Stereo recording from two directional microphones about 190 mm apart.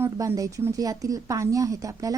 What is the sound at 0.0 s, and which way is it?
Speech, 15° right (ahead or behind).